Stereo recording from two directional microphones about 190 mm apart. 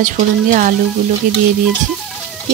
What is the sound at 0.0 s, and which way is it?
Speech, 45° right (ahead or behind).